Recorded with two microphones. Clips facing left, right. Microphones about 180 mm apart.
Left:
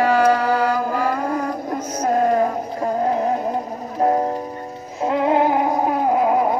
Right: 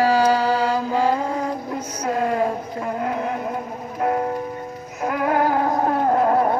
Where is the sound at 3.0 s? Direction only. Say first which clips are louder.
Left 5 dB; 35° left (ahead or behind).